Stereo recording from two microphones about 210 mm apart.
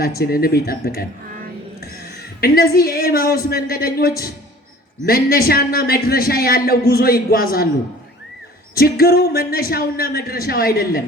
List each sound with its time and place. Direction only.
0.2 s a man's voice: 45° left (ahead or behind)
2.4 s a man's voice: 45° left (ahead or behind)
8.7 s a man's voice: 45° left (ahead or behind)